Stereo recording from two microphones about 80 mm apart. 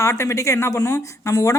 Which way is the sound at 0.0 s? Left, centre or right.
Left.